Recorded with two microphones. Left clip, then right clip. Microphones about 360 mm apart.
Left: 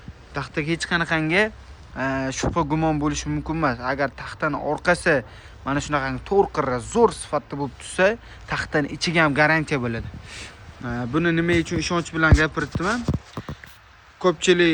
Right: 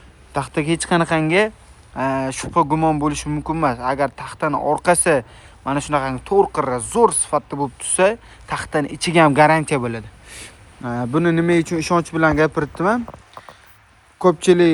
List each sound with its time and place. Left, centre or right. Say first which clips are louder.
0.3 s speech: right 5 dB; centre
13.1 s a sound: left 5 dB; left
14.2 s speech: right 4 dB; centre